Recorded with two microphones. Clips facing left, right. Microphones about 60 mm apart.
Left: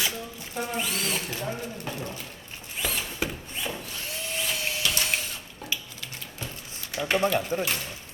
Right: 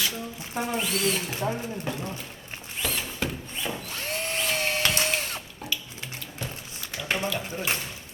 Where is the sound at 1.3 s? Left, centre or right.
Right.